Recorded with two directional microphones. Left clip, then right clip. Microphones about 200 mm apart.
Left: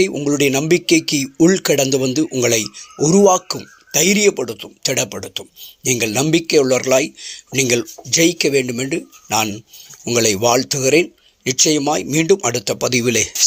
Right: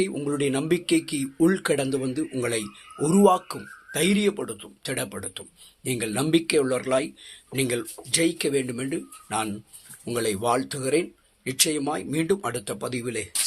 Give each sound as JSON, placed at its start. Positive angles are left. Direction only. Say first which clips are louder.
{"t": 0.0, "sound": "speech", "louder": "left 10 dB", "side_deg": 25}